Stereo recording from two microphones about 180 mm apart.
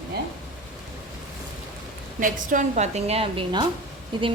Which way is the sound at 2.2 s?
45° right (ahead or behind).